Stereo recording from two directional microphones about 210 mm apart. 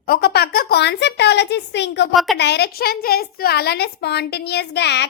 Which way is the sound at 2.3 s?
50° left (ahead or behind).